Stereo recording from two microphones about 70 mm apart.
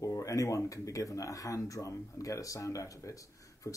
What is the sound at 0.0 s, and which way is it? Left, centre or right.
Speech, left.